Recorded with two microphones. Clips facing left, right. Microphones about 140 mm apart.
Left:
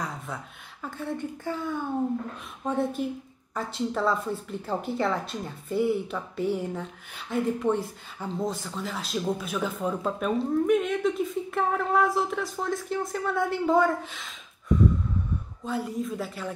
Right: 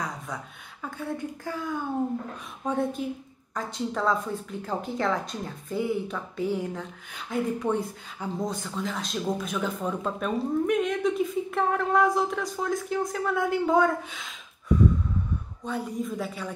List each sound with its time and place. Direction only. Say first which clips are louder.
0.8 s speech: even; centre (ahead or behind)
15.6 s speech: left 1 dB; centre (ahead or behind)